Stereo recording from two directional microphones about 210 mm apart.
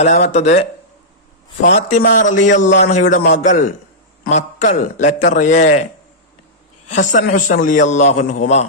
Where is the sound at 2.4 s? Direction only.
35° left (ahead or behind).